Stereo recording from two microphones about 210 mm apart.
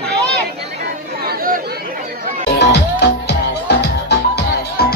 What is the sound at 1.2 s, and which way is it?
Chatter, 45° right (ahead or behind).